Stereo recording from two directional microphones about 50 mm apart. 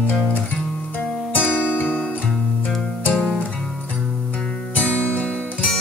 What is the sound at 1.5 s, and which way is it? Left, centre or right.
Music, left.